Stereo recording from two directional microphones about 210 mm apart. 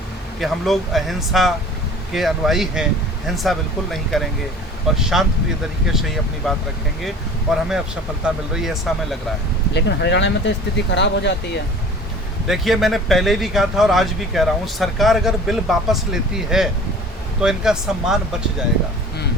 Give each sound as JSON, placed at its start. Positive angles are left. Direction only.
{"t": 0.3, "sound": "speech", "side_deg": 0}
{"t": 9.7, "sound": "speech", "side_deg": 55}
{"t": 12.5, "sound": "speech", "side_deg": 0}